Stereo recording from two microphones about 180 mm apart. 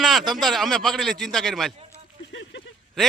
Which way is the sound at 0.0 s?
Centre (ahead or behind).